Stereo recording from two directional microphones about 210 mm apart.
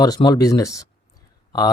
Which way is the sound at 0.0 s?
20° left (ahead or behind).